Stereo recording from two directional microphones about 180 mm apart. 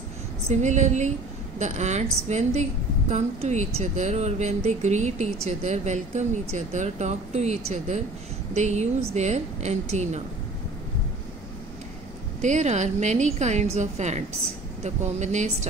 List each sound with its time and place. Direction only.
0.5 s a woman's voice: 40° right (ahead or behind)
12.4 s a woman's voice: 40° right (ahead or behind)